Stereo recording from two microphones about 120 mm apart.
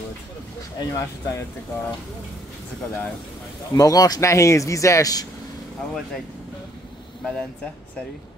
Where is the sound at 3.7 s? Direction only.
30° left (ahead or behind).